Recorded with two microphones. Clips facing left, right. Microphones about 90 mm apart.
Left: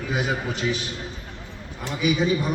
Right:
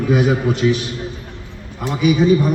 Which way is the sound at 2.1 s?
15° right (ahead or behind).